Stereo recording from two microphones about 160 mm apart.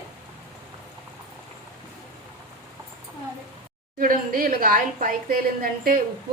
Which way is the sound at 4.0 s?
60° right (ahead or behind).